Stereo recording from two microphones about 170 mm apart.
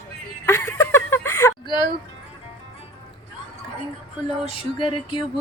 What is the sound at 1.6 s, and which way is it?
Speech, 25° left (ahead or behind).